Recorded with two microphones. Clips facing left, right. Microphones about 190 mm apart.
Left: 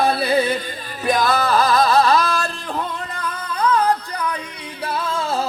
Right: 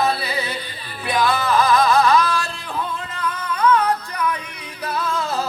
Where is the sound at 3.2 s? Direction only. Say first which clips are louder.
Right 2 dB; 35° left (ahead or behind).